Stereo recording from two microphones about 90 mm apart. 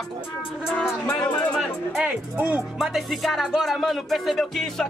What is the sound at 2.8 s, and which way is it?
Music, centre (ahead or behind).